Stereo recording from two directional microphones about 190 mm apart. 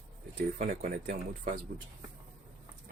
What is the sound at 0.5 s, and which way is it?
Speech, 45° right (ahead or behind).